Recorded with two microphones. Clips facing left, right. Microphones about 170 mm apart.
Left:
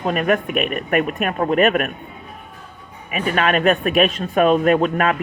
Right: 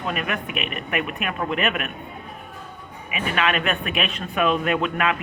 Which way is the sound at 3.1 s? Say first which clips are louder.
Left 5 dB; 40° left (ahead or behind).